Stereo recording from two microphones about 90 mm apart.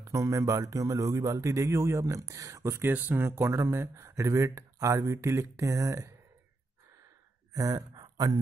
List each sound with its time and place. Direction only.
0.0 s a man's voice: 35° right (ahead or behind)
7.5 s speech: 40° right (ahead or behind)